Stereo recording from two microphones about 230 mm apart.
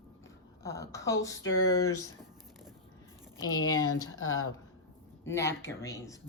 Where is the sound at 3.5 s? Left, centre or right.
Left.